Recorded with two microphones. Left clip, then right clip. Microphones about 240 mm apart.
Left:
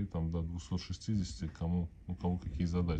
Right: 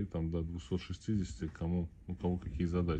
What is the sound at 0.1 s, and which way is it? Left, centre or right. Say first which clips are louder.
Speech: right 2 dB; left.